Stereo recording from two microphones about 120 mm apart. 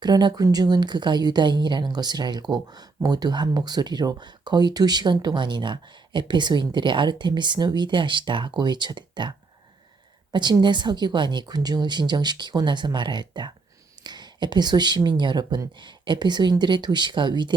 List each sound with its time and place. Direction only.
0.0 s speech: 35° right (ahead or behind)
10.3 s speech: 40° right (ahead or behind)